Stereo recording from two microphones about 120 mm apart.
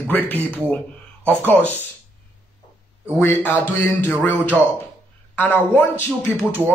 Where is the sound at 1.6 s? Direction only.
15° left (ahead or behind).